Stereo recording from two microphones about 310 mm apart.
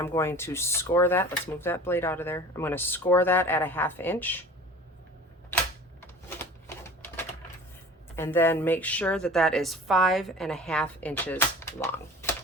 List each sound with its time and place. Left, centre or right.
0.0 s speech: centre
6.0 s typewriter: centre
8.1 s a woman's voice: centre